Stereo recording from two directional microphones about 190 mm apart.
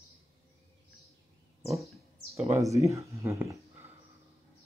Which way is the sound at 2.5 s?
15° right (ahead or behind).